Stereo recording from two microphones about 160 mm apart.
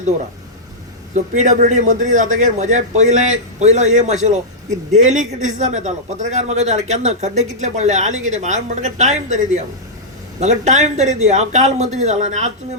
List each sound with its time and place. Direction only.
1.1 s a man's voice: 50° right (ahead or behind)